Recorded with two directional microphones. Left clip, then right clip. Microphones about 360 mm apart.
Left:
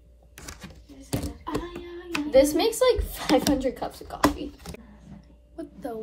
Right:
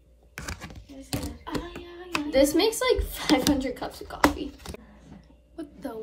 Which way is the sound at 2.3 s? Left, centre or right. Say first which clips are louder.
Left 2 dB; centre.